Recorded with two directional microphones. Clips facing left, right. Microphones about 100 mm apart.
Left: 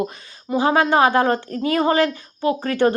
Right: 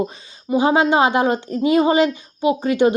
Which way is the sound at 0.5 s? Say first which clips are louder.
Right 1 dB; 20° right (ahead or behind).